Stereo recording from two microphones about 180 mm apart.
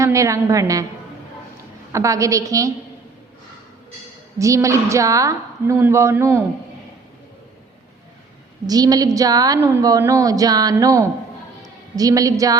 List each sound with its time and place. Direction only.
0.0 s a woman's voice: 15° right (ahead or behind)
1.9 s a woman's voice: 15° right (ahead or behind)
4.4 s a woman's voice: 15° right (ahead or behind)
8.6 s a woman's voice: 20° right (ahead or behind)